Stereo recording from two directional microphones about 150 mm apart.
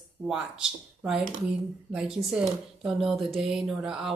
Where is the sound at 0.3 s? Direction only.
5° right (ahead or behind).